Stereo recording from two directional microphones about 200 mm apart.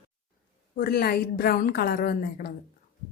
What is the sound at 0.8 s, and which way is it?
Speech, 50° left (ahead or behind).